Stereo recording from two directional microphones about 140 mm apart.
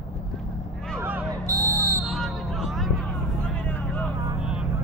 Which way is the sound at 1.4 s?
25° right (ahead or behind).